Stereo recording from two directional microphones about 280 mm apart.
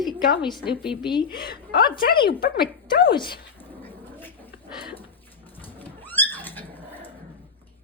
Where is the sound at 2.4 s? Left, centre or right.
Left.